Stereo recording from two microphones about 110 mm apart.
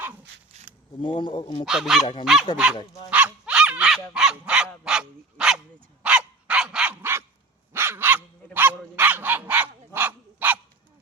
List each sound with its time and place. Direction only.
1.0 s speech: 50° left (ahead or behind)
1.6 s speech: 5° right (ahead or behind)
6.0 s dog: 10° right (ahead or behind)
7.0 s dog: 25° right (ahead or behind)